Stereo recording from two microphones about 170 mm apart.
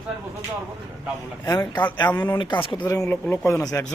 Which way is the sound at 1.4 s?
20° left (ahead or behind).